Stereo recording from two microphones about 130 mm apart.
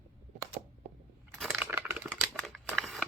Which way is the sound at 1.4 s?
5° right (ahead or behind).